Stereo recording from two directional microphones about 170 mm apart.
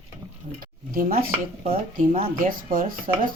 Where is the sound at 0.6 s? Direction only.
60° right (ahead or behind).